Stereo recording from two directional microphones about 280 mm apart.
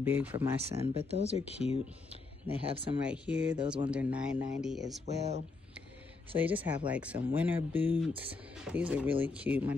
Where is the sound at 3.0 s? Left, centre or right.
Centre.